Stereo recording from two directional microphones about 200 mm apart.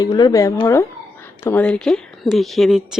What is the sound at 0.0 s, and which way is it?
Speech, 20° left (ahead or behind).